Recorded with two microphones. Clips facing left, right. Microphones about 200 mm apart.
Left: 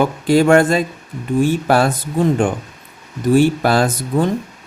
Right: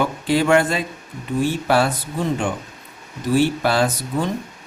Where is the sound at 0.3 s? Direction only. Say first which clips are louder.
Left 5 dB; 45° left (ahead or behind).